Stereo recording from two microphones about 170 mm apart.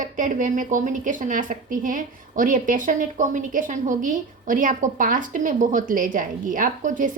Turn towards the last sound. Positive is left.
turn(degrees=-50)  # may be behind; listen again after turning